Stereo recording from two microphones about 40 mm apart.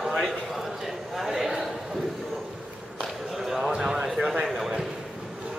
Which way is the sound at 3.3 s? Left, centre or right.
Centre.